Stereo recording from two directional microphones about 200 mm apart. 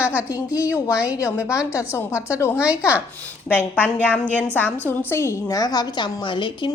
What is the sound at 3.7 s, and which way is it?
A woman's voice, 10° left (ahead or behind).